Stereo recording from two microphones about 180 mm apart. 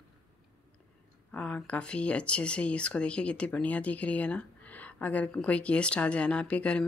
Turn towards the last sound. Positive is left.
turn(degrees=5)  # may be behind; listen again after turning